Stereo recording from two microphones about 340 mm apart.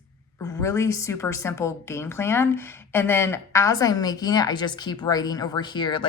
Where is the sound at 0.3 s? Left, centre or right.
Centre.